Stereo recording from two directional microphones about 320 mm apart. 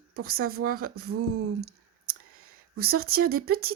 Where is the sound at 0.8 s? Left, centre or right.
Right.